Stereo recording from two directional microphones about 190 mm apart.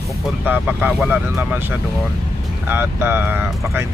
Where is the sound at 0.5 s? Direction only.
10° right (ahead or behind).